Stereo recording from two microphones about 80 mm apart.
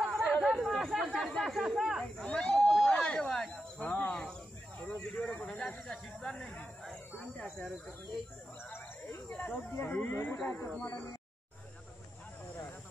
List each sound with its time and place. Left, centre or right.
0.0 s chatter: centre
1.1 s speech: centre
2.2 s a sound: centre
3.8 s snake: centre
4.1 s snake: centre
4.7 s a sound: centre
5.5 s speech: centre
9.4 s speech: centre
9.7 s speech: left